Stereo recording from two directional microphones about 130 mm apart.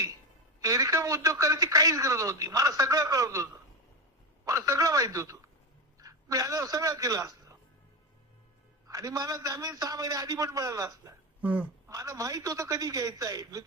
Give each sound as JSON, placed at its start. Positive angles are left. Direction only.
{"t": 0.6, "sound": "speech", "side_deg": -25}
{"t": 4.5, "sound": "a man's voice", "side_deg": -25}
{"t": 8.8, "sound": "speech", "side_deg": -25}